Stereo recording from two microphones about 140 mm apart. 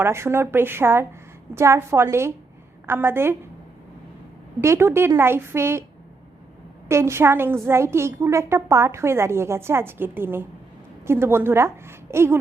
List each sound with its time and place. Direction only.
0.0 s a woman's voice: 20° right (ahead or behind)
4.6 s a woman's voice: 20° right (ahead or behind)
6.8 s a woman's voice: 20° right (ahead or behind)